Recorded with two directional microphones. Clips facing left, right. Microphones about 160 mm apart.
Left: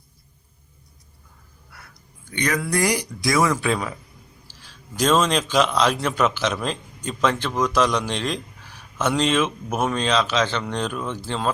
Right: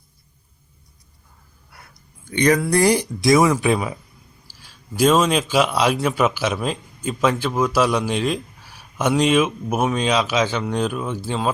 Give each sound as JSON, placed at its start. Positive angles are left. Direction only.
{"t": 2.4, "sound": "speech", "side_deg": -30}
{"t": 4.5, "sound": "a sound", "side_deg": -10}
{"t": 4.9, "sound": "a man's voice", "side_deg": -5}